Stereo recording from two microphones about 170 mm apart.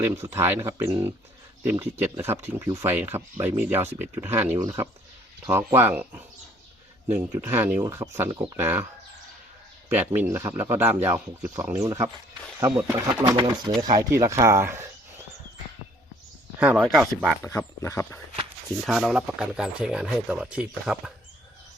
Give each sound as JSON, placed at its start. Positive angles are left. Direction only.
{"t": 0.0, "sound": "speech", "side_deg": -15}
{"t": 8.5, "sound": "speech", "side_deg": -10}
{"t": 10.2, "sound": "speech", "side_deg": -15}
{"t": 13.2, "sound": "speech", "side_deg": -30}
{"t": 16.6, "sound": "speech", "side_deg": -5}
{"t": 17.6, "sound": "speech", "side_deg": 15}
{"t": 18.9, "sound": "speech", "side_deg": 0}